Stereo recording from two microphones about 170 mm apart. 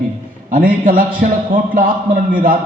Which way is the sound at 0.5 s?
55° right (ahead or behind).